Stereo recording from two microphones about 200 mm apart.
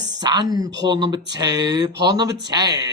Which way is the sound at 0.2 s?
20° right (ahead or behind).